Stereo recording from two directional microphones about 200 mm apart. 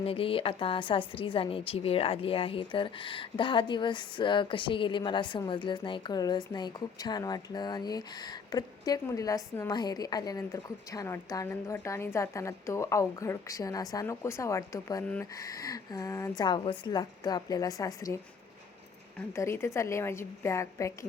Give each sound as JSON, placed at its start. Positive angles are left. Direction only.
{"t": 0.0, "sound": "a woman's voice", "side_deg": 30}
{"t": 15.0, "sound": "a woman's voice", "side_deg": 5}
{"t": 15.4, "sound": "a woman's voice", "side_deg": 20}